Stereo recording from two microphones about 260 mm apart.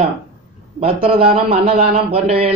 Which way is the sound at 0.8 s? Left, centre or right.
Right.